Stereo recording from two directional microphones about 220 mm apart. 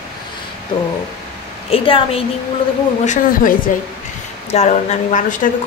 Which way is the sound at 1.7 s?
25° left (ahead or behind).